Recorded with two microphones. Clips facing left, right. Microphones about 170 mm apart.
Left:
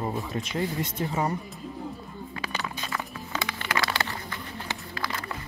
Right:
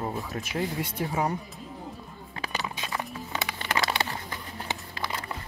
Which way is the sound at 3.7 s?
25° right (ahead or behind).